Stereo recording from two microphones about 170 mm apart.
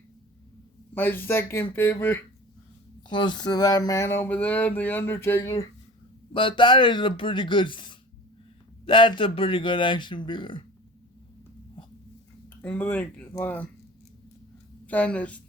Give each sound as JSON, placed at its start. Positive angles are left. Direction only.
{"t": 0.9, "sound": "speech", "side_deg": 10}
{"t": 3.1, "sound": "speech", "side_deg": 25}
{"t": 6.3, "sound": "speech", "side_deg": 30}
{"t": 12.6, "sound": "speech", "side_deg": 10}
{"t": 14.8, "sound": "speech", "side_deg": 10}